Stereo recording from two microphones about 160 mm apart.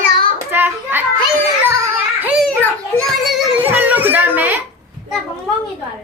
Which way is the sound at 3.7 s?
10° right (ahead or behind).